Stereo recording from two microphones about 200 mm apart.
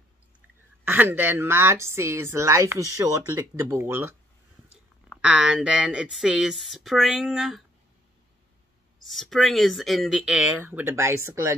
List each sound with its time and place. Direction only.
0.8 s a woman's voice: 10° right (ahead or behind)
9.0 s a woman's voice: centre (ahead or behind)